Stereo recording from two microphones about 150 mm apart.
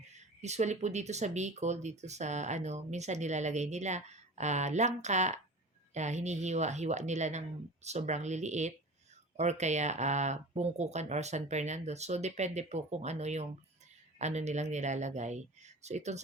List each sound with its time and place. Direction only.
0.4 s speech: 50° right (ahead or behind)